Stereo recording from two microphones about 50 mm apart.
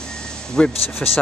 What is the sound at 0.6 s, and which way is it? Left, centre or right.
Speech, centre.